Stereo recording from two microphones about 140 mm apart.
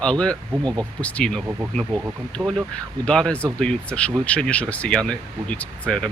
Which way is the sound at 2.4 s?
15° right (ahead or behind).